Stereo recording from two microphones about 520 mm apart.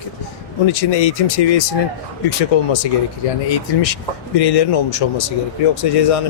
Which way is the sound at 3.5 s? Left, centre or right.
Left.